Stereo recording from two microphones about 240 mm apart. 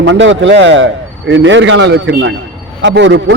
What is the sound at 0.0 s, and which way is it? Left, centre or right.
A man's voice, right.